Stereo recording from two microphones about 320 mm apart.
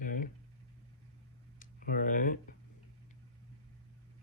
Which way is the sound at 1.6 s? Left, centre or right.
Left.